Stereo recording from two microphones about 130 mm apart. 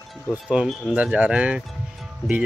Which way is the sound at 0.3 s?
5° right (ahead or behind).